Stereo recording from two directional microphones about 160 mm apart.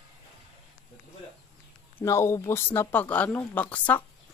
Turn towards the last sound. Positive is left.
turn(degrees=10)  # may be behind; listen again after turning